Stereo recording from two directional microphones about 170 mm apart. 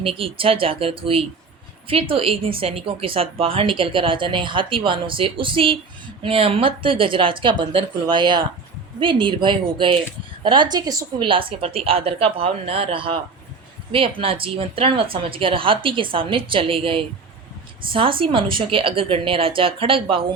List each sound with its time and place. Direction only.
0.0 s speech: 30° right (ahead or behind)